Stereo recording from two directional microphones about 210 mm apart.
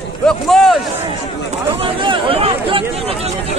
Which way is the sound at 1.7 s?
25° right (ahead or behind).